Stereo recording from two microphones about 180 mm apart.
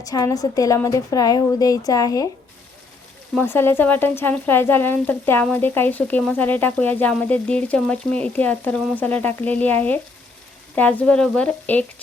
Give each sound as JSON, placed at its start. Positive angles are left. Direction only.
{"t": 0.0, "sound": "a woman's voice", "side_deg": 20}
{"t": 3.3, "sound": "speech", "side_deg": 15}